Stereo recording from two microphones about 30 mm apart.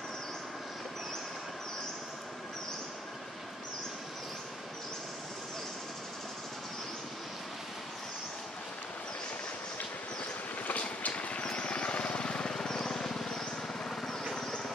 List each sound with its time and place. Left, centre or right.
10.7 s vehicle: left
11.5 s vehicle: left; by 13.4 s centre